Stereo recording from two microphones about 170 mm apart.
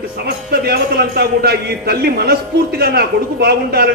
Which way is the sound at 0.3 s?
70° right (ahead or behind).